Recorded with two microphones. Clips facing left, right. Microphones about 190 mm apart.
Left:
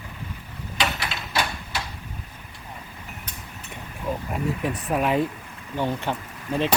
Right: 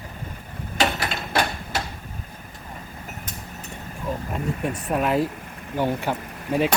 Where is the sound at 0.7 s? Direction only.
45° right (ahead or behind).